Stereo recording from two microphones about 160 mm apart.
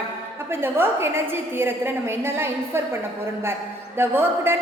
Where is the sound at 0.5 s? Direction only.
15° right (ahead or behind).